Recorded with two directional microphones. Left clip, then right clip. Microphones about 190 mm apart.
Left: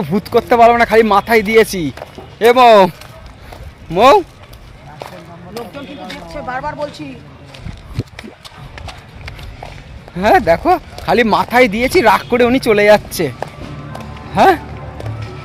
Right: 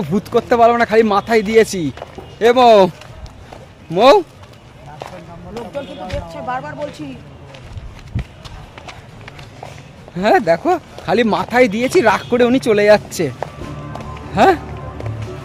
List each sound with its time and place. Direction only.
0.0 s speech: centre (ahead or behind)
3.9 s speech: centre (ahead or behind)
5.6 s a sound: 65° left (ahead or behind)
6.3 s speech: 15° left (ahead or behind)
8.0 s a sound: 60° left (ahead or behind)
8.7 s horse: 65° left (ahead or behind)
10.2 s speech: centre (ahead or behind)
14.3 s speech: centre (ahead or behind)